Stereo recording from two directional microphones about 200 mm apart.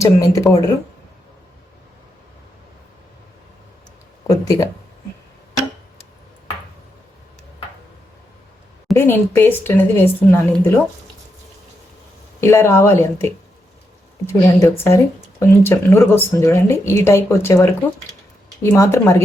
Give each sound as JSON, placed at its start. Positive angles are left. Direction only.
{"t": 0.0, "sound": "a woman's voice", "side_deg": 15}
{"t": 4.3, "sound": "a woman's voice", "side_deg": 15}
{"t": 9.0, "sound": "a woman's voice", "side_deg": 10}
{"t": 12.4, "sound": "a woman's voice", "side_deg": 15}